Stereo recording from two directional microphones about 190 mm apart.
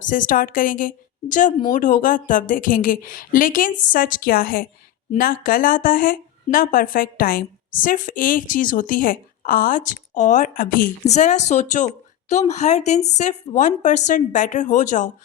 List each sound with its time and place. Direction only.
0.0 s speech: 45° left (ahead or behind)
11.1 s a woman's voice: 40° left (ahead or behind)